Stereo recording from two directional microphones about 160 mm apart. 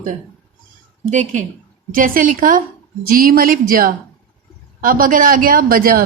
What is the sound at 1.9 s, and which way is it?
A woman's voice, 60° right (ahead or behind).